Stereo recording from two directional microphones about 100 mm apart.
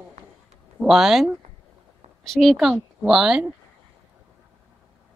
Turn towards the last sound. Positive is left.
turn(degrees=-5)  # may be behind; listen again after turning